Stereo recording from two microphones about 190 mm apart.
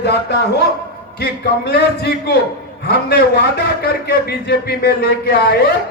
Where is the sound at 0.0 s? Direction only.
60° left (ahead or behind).